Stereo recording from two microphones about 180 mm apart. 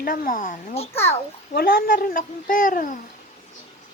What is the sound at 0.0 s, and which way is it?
Speech, 50° left (ahead or behind).